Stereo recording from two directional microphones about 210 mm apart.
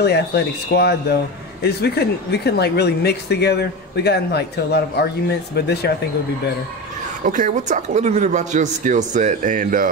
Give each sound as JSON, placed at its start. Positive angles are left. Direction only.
{"t": 0.0, "sound": "a man's voice", "side_deg": 50}
{"t": 7.2, "sound": "a man's voice", "side_deg": -35}